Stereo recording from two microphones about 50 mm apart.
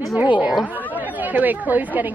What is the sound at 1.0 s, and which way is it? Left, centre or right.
Speech, right.